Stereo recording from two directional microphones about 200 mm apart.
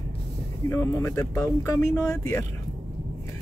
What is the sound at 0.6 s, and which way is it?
Speech, 15° left (ahead or behind).